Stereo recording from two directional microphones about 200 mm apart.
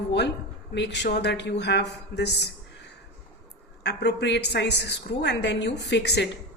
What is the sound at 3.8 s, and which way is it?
Speech, 60° left (ahead or behind).